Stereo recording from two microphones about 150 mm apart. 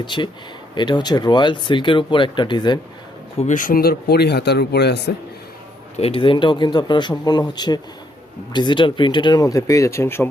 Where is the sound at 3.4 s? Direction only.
60° left (ahead or behind); by 5.0 s 90° left.